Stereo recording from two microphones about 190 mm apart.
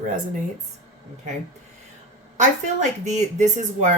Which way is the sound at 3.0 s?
40° right (ahead or behind).